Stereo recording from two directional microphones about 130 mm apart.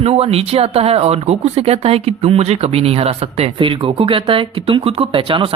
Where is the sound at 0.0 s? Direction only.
50° right (ahead or behind).